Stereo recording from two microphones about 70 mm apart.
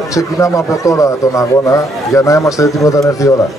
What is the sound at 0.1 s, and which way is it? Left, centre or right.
Speech, left.